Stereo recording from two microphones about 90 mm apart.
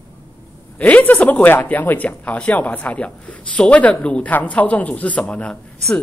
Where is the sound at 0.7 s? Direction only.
15° left (ahead or behind).